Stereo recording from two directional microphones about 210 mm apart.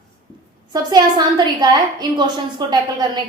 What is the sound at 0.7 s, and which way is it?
A woman's voice, 20° right (ahead or behind).